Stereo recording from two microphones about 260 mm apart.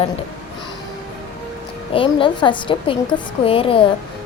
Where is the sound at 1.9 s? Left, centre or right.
Centre.